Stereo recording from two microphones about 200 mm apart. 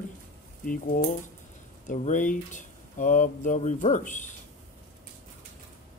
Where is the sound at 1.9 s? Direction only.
40° left (ahead or behind).